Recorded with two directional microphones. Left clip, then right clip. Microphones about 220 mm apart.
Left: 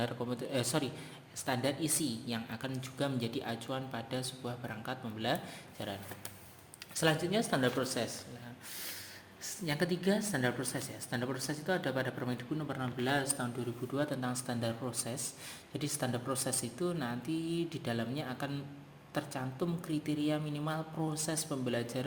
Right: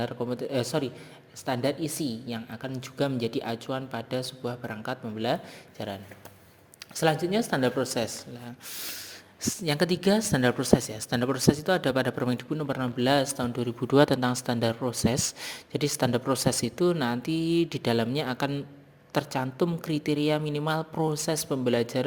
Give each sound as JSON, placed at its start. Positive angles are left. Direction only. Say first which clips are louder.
{"t": 0.0, "sound": "a woman's voice", "louder": "right 6 dB", "side_deg": -25}
{"t": 2.8, "sound": "speech", "louder": "right 9 dB", "side_deg": -30}